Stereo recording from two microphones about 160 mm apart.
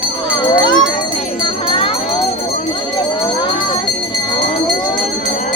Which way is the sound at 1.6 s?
35° left (ahead or behind).